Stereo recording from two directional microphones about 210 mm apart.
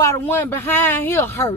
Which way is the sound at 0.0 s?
10° left (ahead or behind).